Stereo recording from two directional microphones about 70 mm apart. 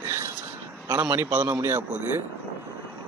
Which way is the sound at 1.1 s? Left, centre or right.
Right.